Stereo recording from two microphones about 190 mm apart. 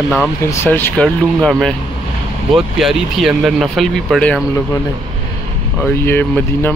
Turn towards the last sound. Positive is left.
turn(degrees=10)  # may be behind; listen again after turning